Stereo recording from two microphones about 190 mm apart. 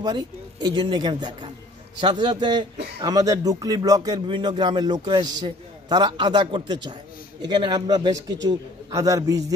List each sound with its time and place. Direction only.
0.0 s a man's voice: 20° right (ahead or behind)